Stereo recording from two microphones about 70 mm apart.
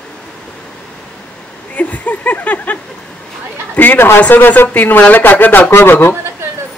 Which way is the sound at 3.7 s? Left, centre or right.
Left.